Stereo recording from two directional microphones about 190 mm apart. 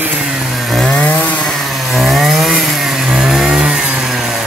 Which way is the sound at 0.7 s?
5° left (ahead or behind).